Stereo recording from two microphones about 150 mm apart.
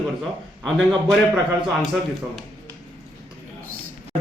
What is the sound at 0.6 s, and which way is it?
Speech, centre (ahead or behind).